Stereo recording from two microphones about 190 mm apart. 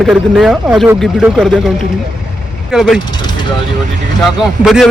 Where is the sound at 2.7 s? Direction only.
Centre (ahead or behind).